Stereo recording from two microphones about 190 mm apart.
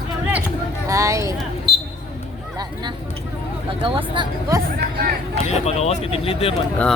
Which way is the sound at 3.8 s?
25° right (ahead or behind).